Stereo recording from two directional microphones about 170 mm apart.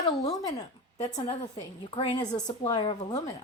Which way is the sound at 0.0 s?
20° left (ahead or behind).